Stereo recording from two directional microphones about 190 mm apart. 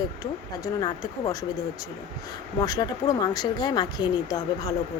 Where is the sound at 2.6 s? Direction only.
20° left (ahead or behind).